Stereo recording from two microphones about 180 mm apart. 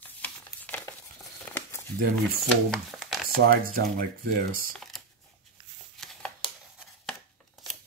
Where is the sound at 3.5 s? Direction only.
50° right (ahead or behind).